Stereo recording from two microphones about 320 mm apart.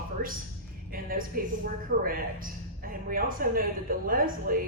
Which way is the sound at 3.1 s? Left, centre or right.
Right.